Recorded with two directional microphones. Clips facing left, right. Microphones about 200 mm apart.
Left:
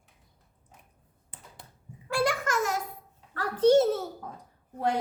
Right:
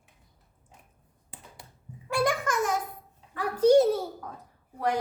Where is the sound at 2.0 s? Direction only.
20° right (ahead or behind).